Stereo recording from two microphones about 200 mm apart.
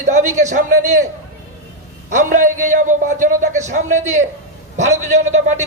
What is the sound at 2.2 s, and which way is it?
A man's voice, 40° right (ahead or behind).